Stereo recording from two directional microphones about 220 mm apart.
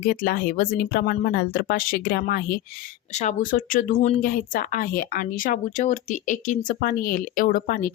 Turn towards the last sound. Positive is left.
turn(degrees=40)  # may be behind; listen again after turning